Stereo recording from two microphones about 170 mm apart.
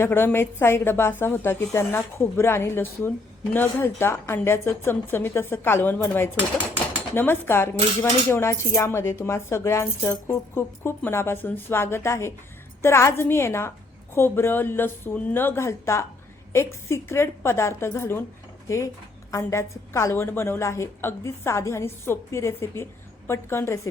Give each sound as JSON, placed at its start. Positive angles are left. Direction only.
{"t": 0.0, "sound": "a woman's voice", "side_deg": 10}